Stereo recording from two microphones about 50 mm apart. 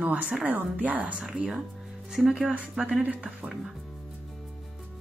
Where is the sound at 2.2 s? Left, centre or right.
Centre.